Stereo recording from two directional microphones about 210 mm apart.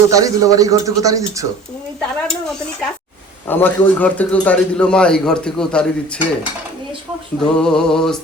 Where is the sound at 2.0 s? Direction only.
Centre (ahead or behind).